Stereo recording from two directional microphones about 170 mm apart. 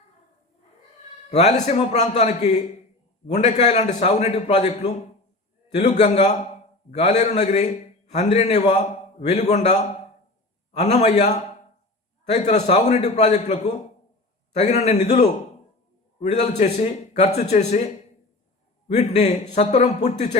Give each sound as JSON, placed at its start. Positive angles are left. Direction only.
{"t": 1.3, "sound": "a man's voice", "side_deg": 40}
{"t": 18.9, "sound": "a man's voice", "side_deg": 40}